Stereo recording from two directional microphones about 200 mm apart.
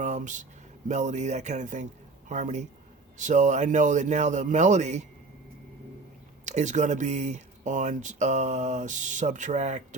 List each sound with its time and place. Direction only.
0.0 s a sound: 35° right (ahead or behind)
0.9 s speech: 35° right (ahead or behind)
6.4 s speech: 35° right (ahead or behind)